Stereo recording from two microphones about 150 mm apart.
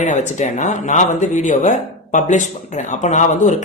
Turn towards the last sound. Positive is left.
turn(degrees=55)  # may be behind; listen again after turning